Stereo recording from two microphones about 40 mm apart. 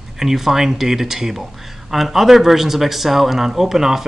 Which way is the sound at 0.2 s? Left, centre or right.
Centre.